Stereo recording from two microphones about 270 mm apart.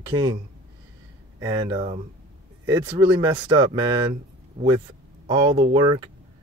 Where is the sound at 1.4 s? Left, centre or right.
Centre.